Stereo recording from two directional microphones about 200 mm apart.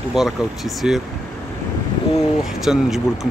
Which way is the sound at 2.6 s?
Centre (ahead or behind).